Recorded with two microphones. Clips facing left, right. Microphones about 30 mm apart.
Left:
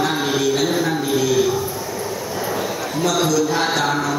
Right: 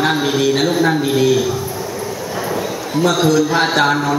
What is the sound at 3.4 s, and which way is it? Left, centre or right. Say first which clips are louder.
Music: right 4 dB; right.